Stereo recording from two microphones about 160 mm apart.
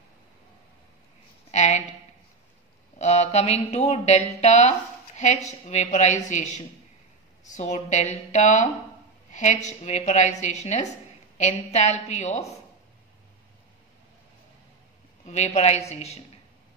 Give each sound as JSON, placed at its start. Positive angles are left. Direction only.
{"t": 1.5, "sound": "a sound", "side_deg": 45}
{"t": 3.0, "sound": "speech", "side_deg": 45}
{"t": 15.2, "sound": "a woman's voice", "side_deg": 45}